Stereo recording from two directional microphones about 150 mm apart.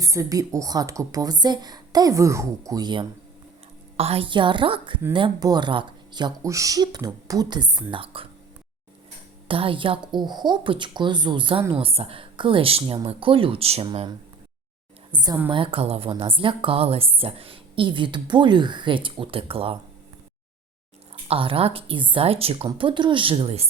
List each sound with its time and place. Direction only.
0.0 s a woman's voice: 20° right (ahead or behind)
3.9 s a woman's voice: 40° right (ahead or behind)
9.5 s a woman's voice: 35° right (ahead or behind)
21.2 s a woman's voice: 40° right (ahead or behind)